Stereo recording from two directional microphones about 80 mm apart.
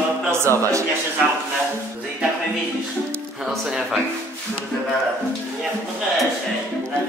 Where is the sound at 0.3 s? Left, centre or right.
Right.